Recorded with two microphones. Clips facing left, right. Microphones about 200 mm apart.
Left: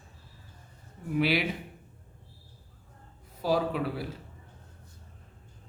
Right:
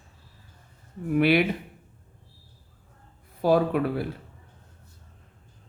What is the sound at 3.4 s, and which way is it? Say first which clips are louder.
Speech: right 6 dB; 55° right (ahead or behind).